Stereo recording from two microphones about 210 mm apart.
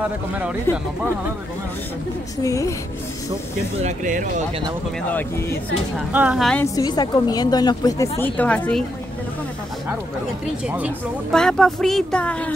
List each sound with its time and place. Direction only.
0.7 s a woman's voice: 10° left (ahead or behind)
2.4 s a woman's voice: 15° left (ahead or behind)
3.8 s speech: 35° right (ahead or behind)
5.9 s speech: 5° right (ahead or behind)
6.6 s a woman's voice: 15° left (ahead or behind)
11.3 s speech: 5° left (ahead or behind)